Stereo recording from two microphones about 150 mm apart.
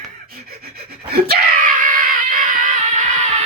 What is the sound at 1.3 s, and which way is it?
Screaming, 60° right (ahead or behind).